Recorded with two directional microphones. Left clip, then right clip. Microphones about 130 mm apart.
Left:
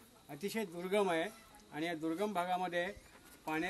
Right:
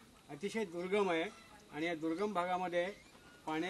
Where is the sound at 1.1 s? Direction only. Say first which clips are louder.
Even; 45° left (ahead or behind).